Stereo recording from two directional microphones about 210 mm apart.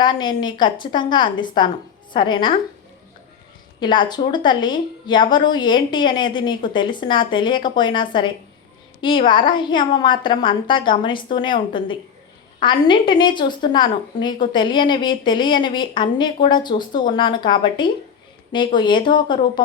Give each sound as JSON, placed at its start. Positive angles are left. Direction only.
{"t": 0.0, "sound": "a woman's voice", "side_deg": 20}
{"t": 3.8, "sound": "a woman's voice", "side_deg": 20}